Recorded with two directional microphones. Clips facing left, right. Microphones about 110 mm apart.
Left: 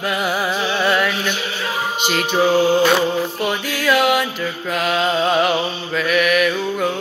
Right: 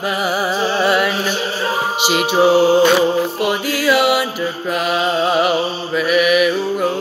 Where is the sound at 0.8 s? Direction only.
5° right (ahead or behind).